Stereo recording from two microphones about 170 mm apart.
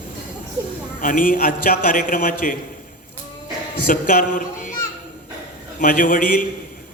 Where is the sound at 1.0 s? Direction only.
55° left (ahead or behind).